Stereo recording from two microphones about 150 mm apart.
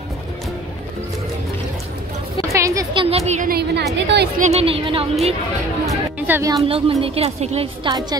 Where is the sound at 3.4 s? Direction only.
90° right.